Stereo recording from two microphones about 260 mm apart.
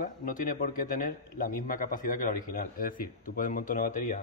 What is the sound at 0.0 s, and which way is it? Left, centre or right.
A man's voice, left.